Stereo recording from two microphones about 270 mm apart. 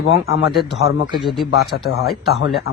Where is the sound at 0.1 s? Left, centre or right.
Left.